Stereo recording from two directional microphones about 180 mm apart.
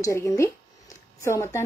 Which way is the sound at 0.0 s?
15° left (ahead or behind).